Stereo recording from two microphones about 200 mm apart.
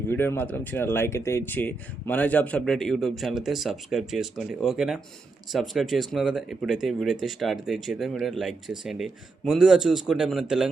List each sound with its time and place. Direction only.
0.1 s speech: 10° left (ahead or behind)